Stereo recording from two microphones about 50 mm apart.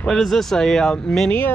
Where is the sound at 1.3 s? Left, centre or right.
Left.